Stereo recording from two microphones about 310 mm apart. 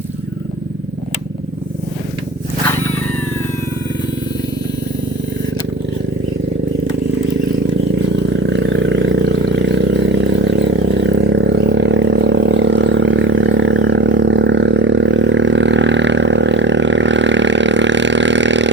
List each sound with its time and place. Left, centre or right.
8.1 s wild animals: right